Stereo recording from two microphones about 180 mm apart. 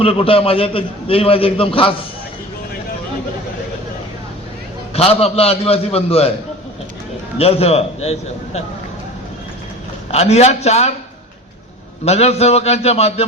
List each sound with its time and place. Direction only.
0.0 s a man's voice: 30° left (ahead or behind)
4.9 s a man's voice: 35° left (ahead or behind)
7.3 s a man's voice: 35° left (ahead or behind)
10.1 s a man's voice: 35° left (ahead or behind)
12.0 s a man's voice: 35° left (ahead or behind)